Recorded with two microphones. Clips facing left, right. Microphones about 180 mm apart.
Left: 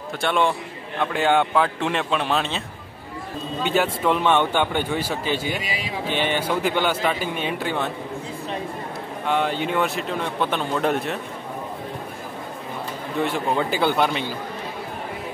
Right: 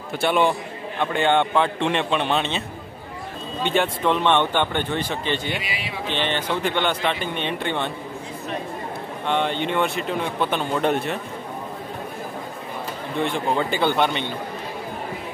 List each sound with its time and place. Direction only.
0.2 s a man's voice: 5° right (ahead or behind)
3.6 s speech: 5° left (ahead or behind)
5.6 s speech: 40° left (ahead or behind)
6.0 s speech: 10° left (ahead or behind)
9.2 s a man's voice: 5° left (ahead or behind)
13.2 s a man's voice: 5° left (ahead or behind)